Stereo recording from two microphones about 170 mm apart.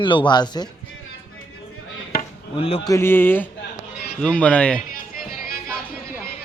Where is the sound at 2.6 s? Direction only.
35° left (ahead or behind).